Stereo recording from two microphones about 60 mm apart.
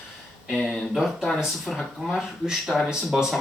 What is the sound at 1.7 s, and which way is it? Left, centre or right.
Speech, centre.